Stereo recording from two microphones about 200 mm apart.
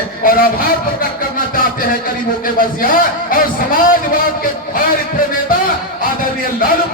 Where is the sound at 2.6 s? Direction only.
45° left (ahead or behind).